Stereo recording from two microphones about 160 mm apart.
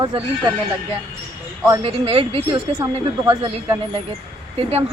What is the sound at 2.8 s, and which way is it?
Speech, 20° right (ahead or behind).